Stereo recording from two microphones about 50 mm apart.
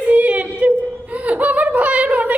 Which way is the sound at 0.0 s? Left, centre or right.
Right.